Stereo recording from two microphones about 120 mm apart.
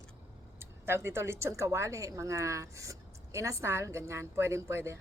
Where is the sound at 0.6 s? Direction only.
20° right (ahead or behind).